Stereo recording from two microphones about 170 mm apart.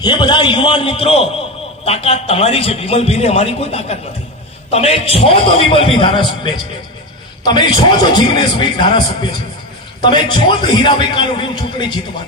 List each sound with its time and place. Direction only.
0.0 s a man's voice: 25° left (ahead or behind)